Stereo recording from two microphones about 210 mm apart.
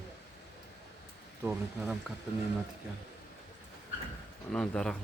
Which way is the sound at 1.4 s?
10° right (ahead or behind).